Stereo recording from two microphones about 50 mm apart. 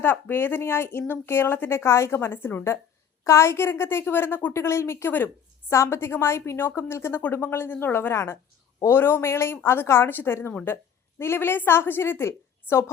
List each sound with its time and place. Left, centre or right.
0.0 s speech: left
3.2 s speech: left
4.5 s a woman's voice: left
5.1 s a woman's voice: left
5.7 s a woman's voice: left
8.1 s a woman's voice: left